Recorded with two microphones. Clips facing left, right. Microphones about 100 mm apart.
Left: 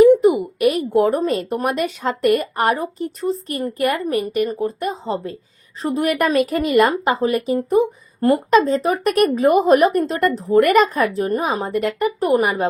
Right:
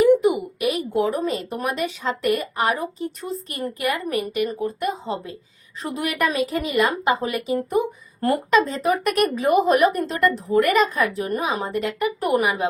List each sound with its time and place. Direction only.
0.0 s a sound: 35° left (ahead or behind)
1.6 s a woman's voice: 50° left (ahead or behind)
7.0 s a woman's voice: 35° left (ahead or behind)
7.7 s a woman's voice: 25° left (ahead or behind)